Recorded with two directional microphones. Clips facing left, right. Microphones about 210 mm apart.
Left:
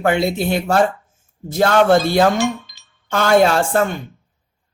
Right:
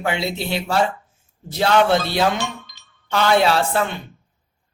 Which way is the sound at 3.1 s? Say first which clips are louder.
Left 3 dB; 45° left (ahead or behind).